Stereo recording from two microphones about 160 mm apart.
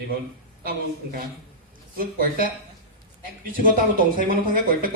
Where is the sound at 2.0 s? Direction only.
65° right (ahead or behind).